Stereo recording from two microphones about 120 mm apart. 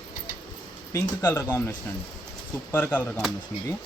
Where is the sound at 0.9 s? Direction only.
20° left (ahead or behind).